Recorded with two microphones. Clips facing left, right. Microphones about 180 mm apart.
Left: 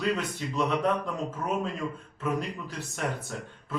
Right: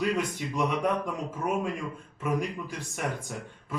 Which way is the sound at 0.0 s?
10° right (ahead or behind).